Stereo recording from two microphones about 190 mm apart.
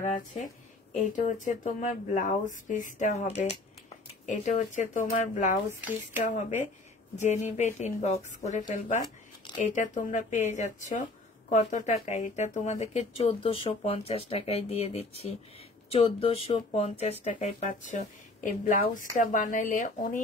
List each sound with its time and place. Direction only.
0.0 s a woman's voice: 40° left (ahead or behind)
5.8 s speech: 10° right (ahead or behind)
6.2 s a woman's voice: 40° left (ahead or behind)